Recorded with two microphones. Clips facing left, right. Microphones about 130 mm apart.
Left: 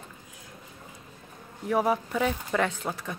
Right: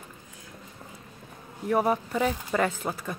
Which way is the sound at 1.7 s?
Centre (ahead or behind).